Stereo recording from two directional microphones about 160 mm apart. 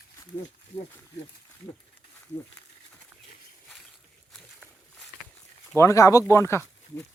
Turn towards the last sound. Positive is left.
turn(degrees=15)  # may be behind; listen again after turning